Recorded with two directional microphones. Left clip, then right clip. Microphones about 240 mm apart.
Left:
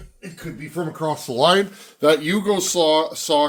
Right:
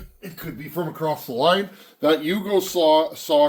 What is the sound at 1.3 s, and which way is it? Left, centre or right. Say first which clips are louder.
Speech: left 4 dB; left.